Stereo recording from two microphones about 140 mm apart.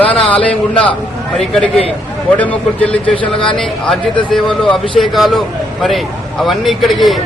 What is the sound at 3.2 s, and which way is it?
Speech, 40° left (ahead or behind).